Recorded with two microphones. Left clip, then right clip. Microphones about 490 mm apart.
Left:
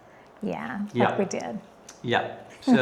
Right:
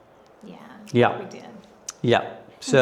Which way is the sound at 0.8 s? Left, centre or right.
Right.